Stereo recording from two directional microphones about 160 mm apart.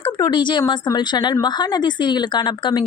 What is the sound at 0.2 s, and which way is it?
Speech, 30° left (ahead or behind).